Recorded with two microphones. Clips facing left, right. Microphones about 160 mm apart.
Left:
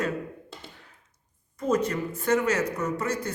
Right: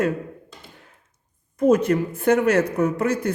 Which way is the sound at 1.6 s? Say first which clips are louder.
Right 8 dB; 60° right (ahead or behind).